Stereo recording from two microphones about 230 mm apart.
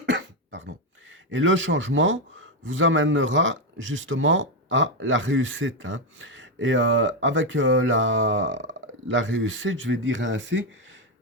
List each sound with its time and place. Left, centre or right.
0.0 s cough: right
1.3 s a man's voice: right